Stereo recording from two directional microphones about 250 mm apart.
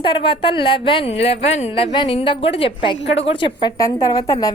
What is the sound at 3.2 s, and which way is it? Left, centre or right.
A woman's voice, left.